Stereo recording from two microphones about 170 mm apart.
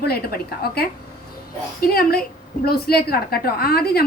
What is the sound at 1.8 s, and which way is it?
A woman's voice, 60° left (ahead or behind).